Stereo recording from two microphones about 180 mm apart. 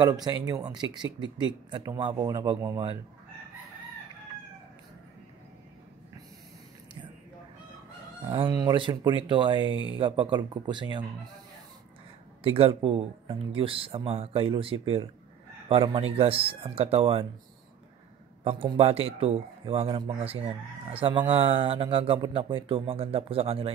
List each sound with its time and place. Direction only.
0.0 s speech: 20° right (ahead or behind)
8.3 s speech: 20° right (ahead or behind)
12.4 s speech: 30° right (ahead or behind)
18.4 s speech: 30° right (ahead or behind)